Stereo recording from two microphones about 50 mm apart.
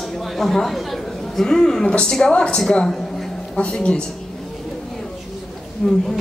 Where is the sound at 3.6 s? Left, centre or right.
Centre.